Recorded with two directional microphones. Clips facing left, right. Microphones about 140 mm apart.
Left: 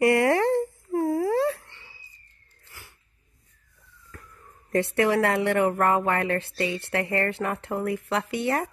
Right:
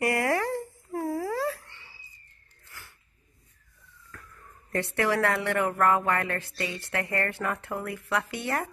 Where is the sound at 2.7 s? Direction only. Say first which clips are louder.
Even; 15° left (ahead or behind).